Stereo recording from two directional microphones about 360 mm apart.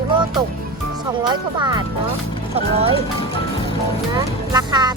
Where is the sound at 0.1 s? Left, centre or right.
Centre.